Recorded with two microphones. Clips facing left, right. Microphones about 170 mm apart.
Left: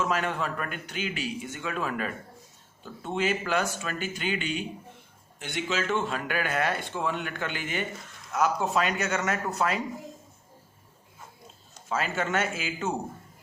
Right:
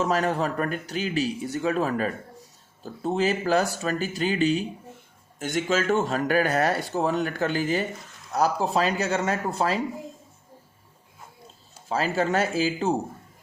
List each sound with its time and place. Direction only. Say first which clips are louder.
0.0 s speech: right 5 dB; 40° right (ahead or behind)
11.9 s speech: right 5 dB; 35° right (ahead or behind)